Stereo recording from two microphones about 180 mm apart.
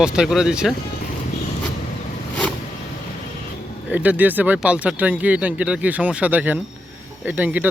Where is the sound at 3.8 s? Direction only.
10° right (ahead or behind).